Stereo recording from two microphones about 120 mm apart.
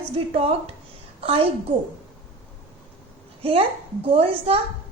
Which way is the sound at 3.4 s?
50° right (ahead or behind).